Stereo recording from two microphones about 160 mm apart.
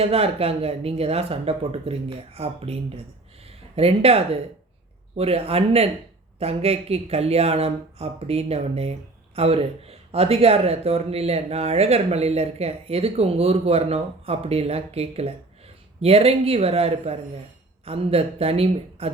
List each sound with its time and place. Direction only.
0.0 s speech: 40° right (ahead or behind)